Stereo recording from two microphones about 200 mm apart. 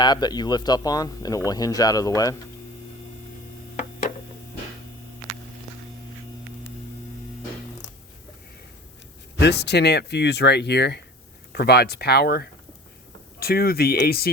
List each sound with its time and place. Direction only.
0.0 s speech: 20° left (ahead or behind)
9.4 s speech: 55° left (ahead or behind)